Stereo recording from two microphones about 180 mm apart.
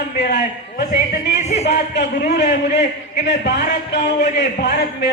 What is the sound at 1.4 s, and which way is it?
Speech, 40° left (ahead or behind).